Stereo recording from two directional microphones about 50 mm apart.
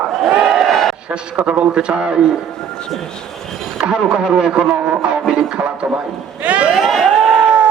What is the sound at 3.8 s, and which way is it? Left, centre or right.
Speech, centre.